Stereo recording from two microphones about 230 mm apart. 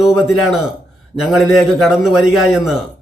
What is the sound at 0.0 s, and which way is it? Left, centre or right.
A man's voice, centre.